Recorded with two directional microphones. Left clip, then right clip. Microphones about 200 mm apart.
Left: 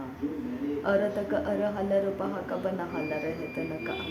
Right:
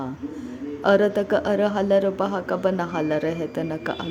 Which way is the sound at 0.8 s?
40° right (ahead or behind).